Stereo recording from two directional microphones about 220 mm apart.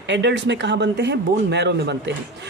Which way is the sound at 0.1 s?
50° right (ahead or behind).